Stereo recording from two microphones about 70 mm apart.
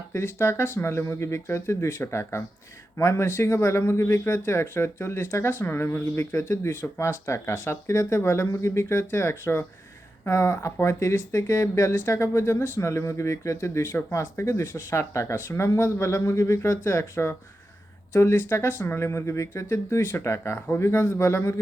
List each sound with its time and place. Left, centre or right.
0.1 s speech: left